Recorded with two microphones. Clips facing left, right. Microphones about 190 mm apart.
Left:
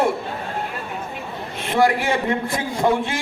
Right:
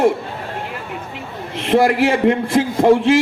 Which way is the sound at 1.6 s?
80° right.